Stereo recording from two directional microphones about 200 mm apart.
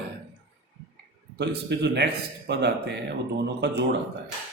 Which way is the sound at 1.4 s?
55° right (ahead or behind).